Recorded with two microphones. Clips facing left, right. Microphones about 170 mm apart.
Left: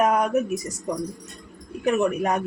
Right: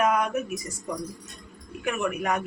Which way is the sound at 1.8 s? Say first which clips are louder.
Left 6 dB; 35° left (ahead or behind).